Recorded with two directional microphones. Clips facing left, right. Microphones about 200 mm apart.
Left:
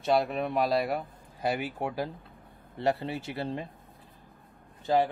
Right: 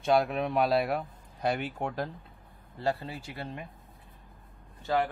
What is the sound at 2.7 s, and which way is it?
Speech, 25° left (ahead or behind).